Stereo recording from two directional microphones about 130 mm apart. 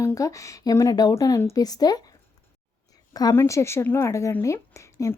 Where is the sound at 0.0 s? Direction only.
25° left (ahead or behind).